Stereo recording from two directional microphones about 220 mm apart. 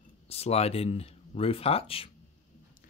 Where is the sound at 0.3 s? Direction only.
25° left (ahead or behind).